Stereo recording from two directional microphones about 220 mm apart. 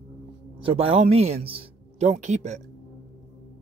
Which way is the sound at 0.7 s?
25° right (ahead or behind).